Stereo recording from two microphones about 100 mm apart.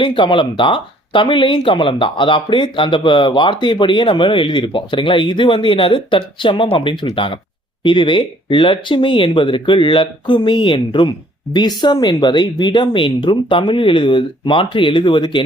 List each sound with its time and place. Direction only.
0.0 s speech: 50° left (ahead or behind)